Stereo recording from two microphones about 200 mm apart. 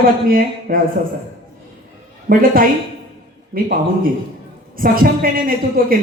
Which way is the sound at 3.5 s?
45° right (ahead or behind).